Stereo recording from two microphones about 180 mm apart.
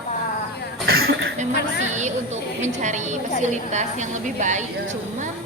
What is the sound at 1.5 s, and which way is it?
Speech, 65° left (ahead or behind).